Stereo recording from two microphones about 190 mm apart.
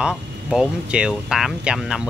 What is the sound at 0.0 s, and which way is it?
Speech, 5° right (ahead or behind).